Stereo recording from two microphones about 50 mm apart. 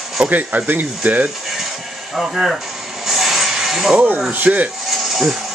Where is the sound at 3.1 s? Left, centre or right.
Centre.